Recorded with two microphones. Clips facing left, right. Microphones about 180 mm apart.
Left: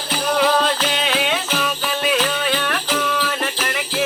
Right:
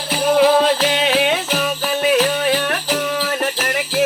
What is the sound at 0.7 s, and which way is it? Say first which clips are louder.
Music: right 5 dB; 55° right (ahead or behind).